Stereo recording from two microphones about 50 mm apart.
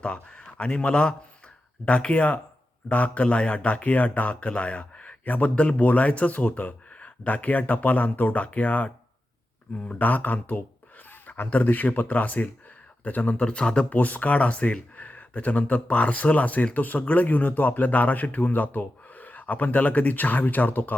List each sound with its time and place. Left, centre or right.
0.0 s speech: left
13.9 s speech: left